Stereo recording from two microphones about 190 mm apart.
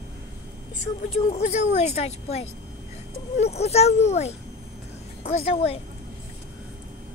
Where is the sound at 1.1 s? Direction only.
35° left (ahead or behind).